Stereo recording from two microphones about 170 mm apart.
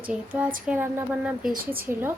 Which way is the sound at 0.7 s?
10° right (ahead or behind).